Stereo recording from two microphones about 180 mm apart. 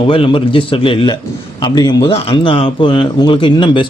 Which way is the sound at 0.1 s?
30° left (ahead or behind).